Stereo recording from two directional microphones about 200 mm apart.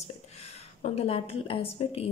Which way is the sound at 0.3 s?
30° left (ahead or behind).